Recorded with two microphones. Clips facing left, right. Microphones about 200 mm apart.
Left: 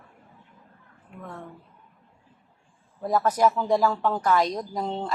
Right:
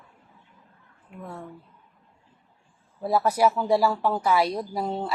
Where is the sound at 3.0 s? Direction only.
10° right (ahead or behind).